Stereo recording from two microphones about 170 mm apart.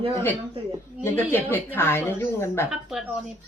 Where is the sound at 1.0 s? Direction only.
15° left (ahead or behind).